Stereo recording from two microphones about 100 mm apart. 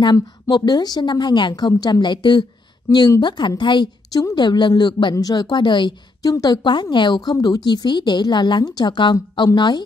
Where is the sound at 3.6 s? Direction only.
50° left (ahead or behind).